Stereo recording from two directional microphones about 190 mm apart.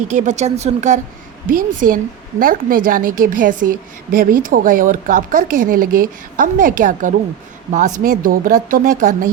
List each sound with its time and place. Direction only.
0.1 s a woman's voice: 40° right (ahead or behind)